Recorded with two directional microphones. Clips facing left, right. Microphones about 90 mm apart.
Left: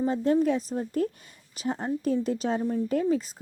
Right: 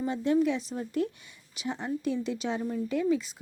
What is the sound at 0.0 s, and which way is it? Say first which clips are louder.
A woman's voice: left 2 dB; 40° left (ahead or behind).